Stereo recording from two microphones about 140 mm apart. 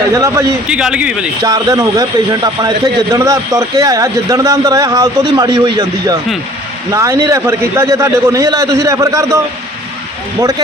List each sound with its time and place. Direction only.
0.1 s a man's voice: 20° right (ahead or behind)
0.7 s speech: 5° right (ahead or behind)
1.4 s a man's voice: 25° right (ahead or behind)